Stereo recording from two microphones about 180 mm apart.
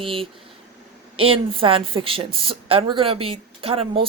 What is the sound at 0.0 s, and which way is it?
A woman's voice, 30° right (ahead or behind).